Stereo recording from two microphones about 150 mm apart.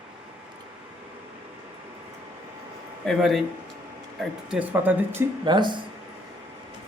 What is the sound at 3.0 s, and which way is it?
Speech, centre (ahead or behind).